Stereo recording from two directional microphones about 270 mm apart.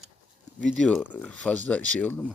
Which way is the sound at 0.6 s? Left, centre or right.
Centre.